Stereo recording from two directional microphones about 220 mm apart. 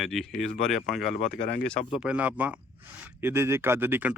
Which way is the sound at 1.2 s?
35° left (ahead or behind).